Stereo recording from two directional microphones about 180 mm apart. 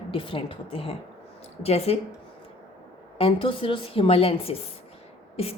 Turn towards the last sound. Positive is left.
turn(degrees=35)  # may be behind; listen again after turning